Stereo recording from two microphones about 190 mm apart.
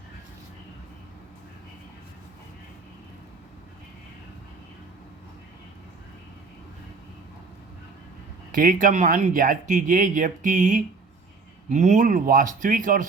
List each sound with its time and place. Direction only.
8.5 s speech: 45° right (ahead or behind)